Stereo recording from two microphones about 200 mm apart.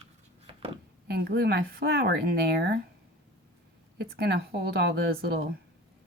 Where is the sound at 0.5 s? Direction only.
30° right (ahead or behind).